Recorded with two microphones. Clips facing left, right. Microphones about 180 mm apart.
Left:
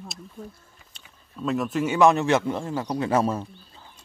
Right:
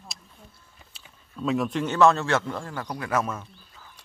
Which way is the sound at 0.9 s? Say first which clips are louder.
Even; centre (ahead or behind).